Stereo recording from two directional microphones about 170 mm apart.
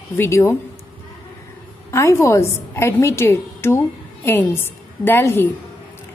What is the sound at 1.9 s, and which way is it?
A woman's voice, 15° left (ahead or behind).